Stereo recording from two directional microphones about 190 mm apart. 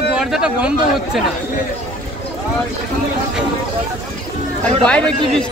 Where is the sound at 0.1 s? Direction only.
5° right (ahead or behind).